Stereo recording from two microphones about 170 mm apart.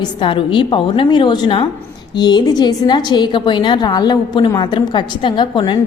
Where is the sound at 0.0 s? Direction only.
30° left (ahead or behind).